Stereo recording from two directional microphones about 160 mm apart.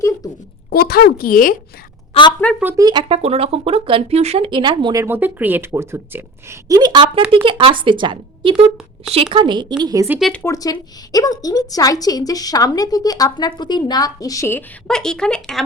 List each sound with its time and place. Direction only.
0.7 s speech: 75° left (ahead or behind)
2.1 s speech: 35° left (ahead or behind)
2.7 s speech: 25° right (ahead or behind)
5.0 s a woman's voice: 10° right (ahead or behind)
10.1 s speech: centre (ahead or behind)
10.4 s speech: 20° left (ahead or behind)
14.8 s speech: 5° left (ahead or behind)